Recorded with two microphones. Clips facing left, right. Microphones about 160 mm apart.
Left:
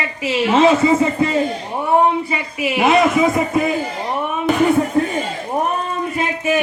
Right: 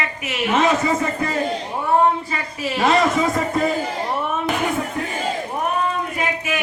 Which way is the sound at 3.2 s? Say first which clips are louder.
Left 3 dB; 5° left (ahead or behind).